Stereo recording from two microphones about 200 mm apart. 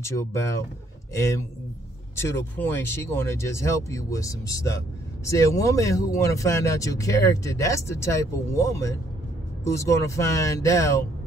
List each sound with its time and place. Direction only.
0.0 s speech: 15° left (ahead or behind)